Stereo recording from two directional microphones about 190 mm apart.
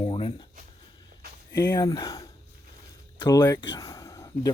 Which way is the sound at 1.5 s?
15° left (ahead or behind).